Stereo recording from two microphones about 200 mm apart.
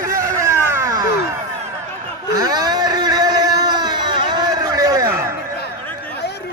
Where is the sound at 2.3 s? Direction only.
20° right (ahead or behind).